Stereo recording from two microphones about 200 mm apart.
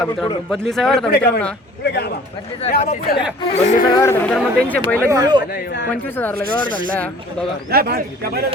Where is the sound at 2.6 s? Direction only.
35° left (ahead or behind).